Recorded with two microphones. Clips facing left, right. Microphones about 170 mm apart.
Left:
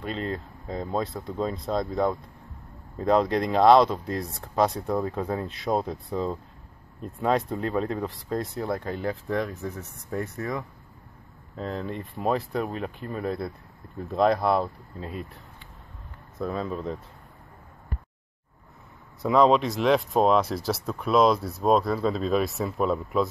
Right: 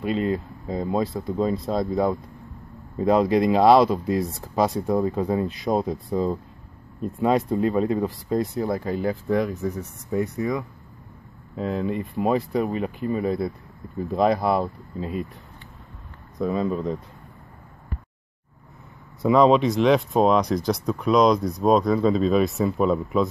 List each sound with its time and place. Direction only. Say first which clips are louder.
0.0 s speech: right 7 dB; 5° right (ahead or behind)
9.8 s speech: right 6 dB; 15° right (ahead or behind)
11.5 s speech: right 6 dB; 5° right (ahead or behind)
16.3 s speech: right 6 dB; centre (ahead or behind)
19.2 s speech: right 3 dB; centre (ahead or behind)